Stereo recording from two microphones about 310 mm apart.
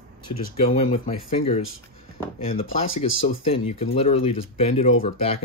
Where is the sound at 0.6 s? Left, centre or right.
Centre.